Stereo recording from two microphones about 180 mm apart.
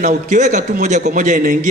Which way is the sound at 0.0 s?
45° right (ahead or behind).